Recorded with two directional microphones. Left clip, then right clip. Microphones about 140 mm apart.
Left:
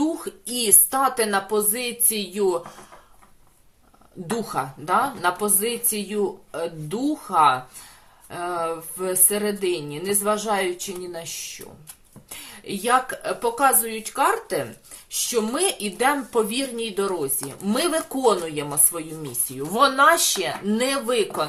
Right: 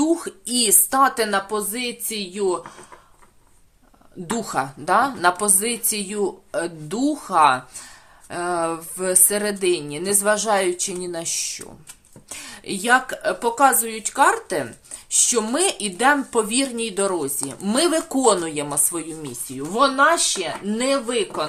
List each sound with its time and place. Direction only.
0.0 s speech: 45° right (ahead or behind)
1.5 s speech: 20° right (ahead or behind)
4.4 s speech: 45° right (ahead or behind); by 21.4 s 15° right (ahead or behind)